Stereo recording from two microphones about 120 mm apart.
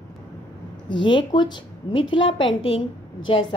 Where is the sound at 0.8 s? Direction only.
40° left (ahead or behind).